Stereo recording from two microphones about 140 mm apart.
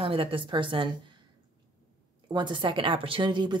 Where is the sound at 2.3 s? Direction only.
35° right (ahead or behind).